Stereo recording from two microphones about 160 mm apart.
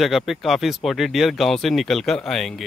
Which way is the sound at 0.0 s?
Centre (ahead or behind).